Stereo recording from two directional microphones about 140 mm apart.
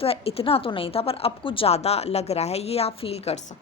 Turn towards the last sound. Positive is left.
turn(degrees=45)  # may be behind; listen again after turning